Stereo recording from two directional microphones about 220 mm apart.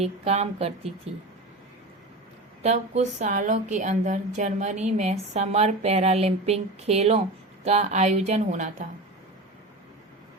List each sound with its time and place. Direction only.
0.0 s speech: 30° right (ahead or behind)
2.6 s a woman's voice: 30° right (ahead or behind)